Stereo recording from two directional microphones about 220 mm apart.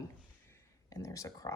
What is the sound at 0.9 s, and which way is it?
Speech, 15° left (ahead or behind).